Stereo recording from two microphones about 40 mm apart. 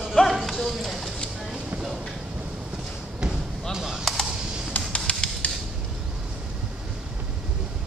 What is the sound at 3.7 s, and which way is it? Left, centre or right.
Speech, centre.